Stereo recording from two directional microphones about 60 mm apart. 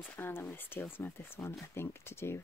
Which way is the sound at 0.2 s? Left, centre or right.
Left.